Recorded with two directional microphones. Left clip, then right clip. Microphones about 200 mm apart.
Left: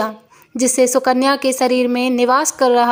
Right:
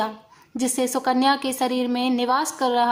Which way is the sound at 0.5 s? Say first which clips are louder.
Left 10 dB; 25° left (ahead or behind).